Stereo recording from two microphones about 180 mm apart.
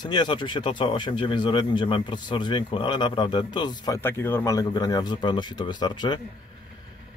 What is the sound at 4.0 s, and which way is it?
Speech, 10° left (ahead or behind).